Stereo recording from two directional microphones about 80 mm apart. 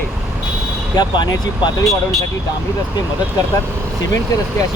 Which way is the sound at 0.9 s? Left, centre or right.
Left.